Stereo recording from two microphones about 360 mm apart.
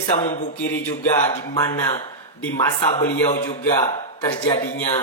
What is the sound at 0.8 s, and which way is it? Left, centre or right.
A man's voice, centre.